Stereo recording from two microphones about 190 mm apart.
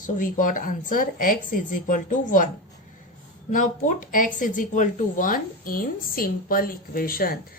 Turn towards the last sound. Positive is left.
turn(degrees=50)  # may be behind; listen again after turning